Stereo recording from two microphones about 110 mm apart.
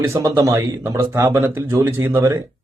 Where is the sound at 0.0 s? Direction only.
25° right (ahead or behind).